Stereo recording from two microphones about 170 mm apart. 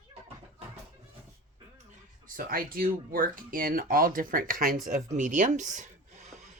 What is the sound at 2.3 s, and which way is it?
Speech, 55° right (ahead or behind).